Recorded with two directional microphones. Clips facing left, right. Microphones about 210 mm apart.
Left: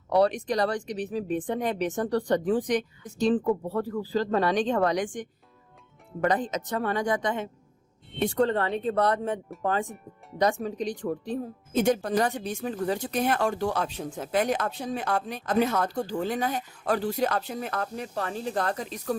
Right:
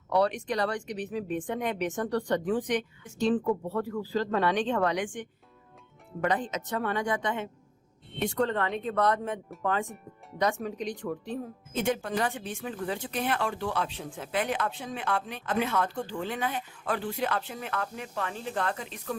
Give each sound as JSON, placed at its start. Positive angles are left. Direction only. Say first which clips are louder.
{"t": 0.1, "sound": "speech", "louder": "left 3 dB", "side_deg": 35}